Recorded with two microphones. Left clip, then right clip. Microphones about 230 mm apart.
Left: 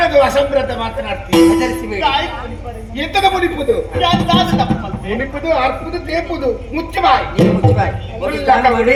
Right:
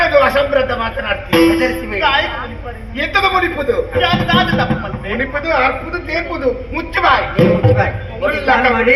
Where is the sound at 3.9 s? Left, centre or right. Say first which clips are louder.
Even; left.